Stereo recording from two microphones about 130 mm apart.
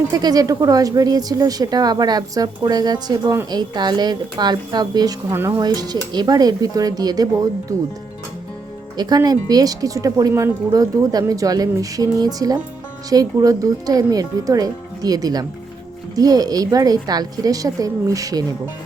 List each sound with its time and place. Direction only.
0.1 s speech: 30° right (ahead or behind)
5.3 s speech: 20° right (ahead or behind)
5.6 s speech: 30° right (ahead or behind)
9.0 s speech: 30° right (ahead or behind)